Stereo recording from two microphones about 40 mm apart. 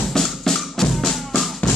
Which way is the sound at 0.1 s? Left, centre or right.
Centre.